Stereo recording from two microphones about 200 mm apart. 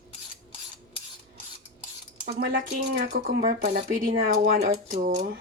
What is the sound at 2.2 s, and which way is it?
Cutlery, 50° right (ahead or behind).